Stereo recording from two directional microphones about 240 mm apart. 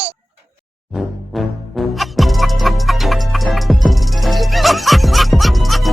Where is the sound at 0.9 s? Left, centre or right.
Centre.